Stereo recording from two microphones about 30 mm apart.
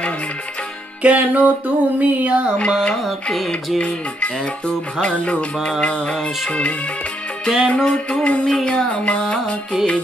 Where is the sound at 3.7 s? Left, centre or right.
Left.